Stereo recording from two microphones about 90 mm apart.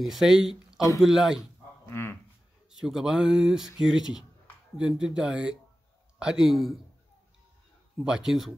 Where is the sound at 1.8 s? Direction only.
25° left (ahead or behind).